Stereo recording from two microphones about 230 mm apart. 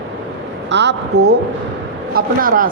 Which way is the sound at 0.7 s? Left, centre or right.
Right.